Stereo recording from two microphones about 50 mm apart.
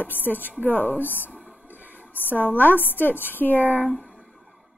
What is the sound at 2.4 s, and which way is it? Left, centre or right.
A woman's voice, left.